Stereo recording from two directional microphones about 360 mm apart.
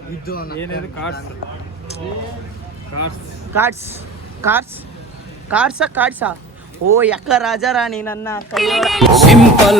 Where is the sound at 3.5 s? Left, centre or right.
Centre.